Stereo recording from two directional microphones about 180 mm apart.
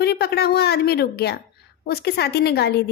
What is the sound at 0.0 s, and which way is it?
A woman's voice, 65° left (ahead or behind).